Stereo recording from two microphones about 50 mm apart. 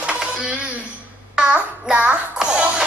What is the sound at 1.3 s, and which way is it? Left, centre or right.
Child singing, right.